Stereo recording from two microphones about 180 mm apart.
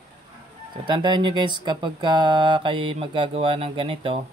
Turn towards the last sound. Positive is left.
turn(degrees=-30)  # may be behind; listen again after turning